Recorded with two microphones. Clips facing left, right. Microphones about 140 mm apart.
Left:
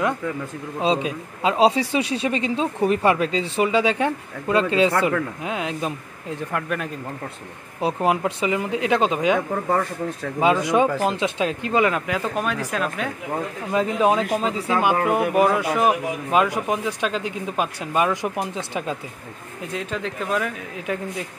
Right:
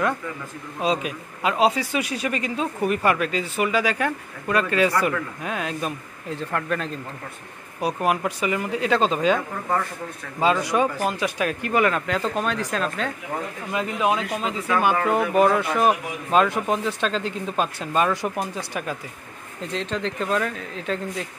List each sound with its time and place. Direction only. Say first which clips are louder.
0.7 s a man's voice: left 2 dB; 25° left (ahead or behind); by 6.9 s 10° left (ahead or behind)
7.8 s a man's voice: left 2 dB; 25° left (ahead or behind)
10.4 s speech: left 2 dB; 20° left (ahead or behind)
13.7 s speech: left 4 dB; 35° left (ahead or behind)
15.0 s speech: even; 10° left (ahead or behind)
19.6 s speech: right 1 dB; 10° left (ahead or behind)